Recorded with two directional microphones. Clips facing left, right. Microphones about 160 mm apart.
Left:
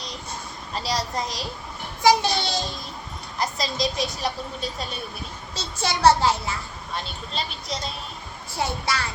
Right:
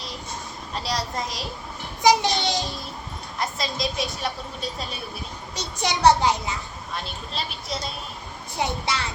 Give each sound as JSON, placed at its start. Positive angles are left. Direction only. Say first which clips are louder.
{"t": 0.7, "sound": "a woman's voice", "louder": "left 1 dB", "side_deg": 0}
{"t": 2.0, "sound": "a child's voice", "louder": "even", "side_deg": -15}
{"t": 3.3, "sound": "a woman's voice", "louder": "left 2 dB", "side_deg": 0}
{"t": 5.5, "sound": "a child's voice", "louder": "right 1 dB", "side_deg": -15}
{"t": 6.9, "sound": "a woman's voice", "louder": "left 1 dB", "side_deg": 0}
{"t": 8.5, "sound": "a child's voice", "louder": "even", "side_deg": -20}